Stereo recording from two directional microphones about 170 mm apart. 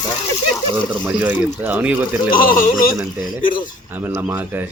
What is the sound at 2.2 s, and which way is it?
Speech, 55° left (ahead or behind).